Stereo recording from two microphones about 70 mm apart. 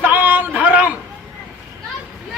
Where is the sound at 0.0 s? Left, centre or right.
Right.